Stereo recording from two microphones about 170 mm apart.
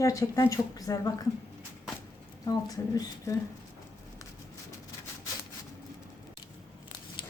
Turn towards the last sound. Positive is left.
turn(degrees=30)  # may be behind; listen again after turning